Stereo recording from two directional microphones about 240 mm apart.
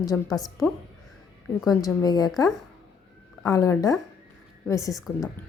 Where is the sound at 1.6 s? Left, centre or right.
Centre.